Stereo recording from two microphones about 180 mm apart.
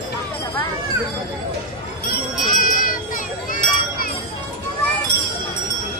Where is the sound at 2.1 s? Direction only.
50° left (ahead or behind).